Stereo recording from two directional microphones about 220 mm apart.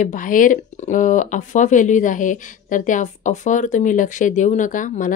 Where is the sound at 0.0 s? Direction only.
35° left (ahead or behind).